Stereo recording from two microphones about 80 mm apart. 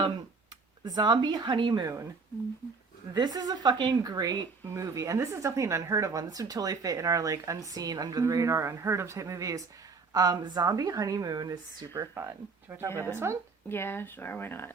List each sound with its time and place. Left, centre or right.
0.9 s a woman's voice: right
3.2 s a woman's voice: right
4.0 s speech: right
12.1 s speech: right
12.9 s speech: left
13.1 s speech: right
13.7 s speech: left